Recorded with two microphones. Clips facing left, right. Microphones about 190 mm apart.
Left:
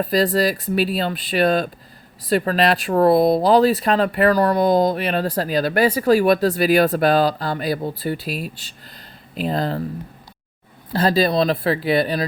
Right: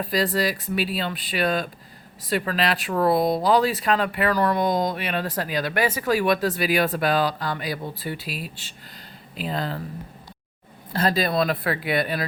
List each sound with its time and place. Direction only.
0.0 s speech: 40° left (ahead or behind)
10.9 s speech: 30° left (ahead or behind)